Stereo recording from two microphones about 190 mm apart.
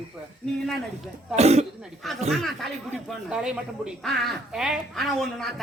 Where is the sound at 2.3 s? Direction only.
Centre (ahead or behind).